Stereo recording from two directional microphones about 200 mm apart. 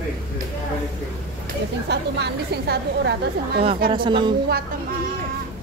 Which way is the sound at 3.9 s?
25° right (ahead or behind).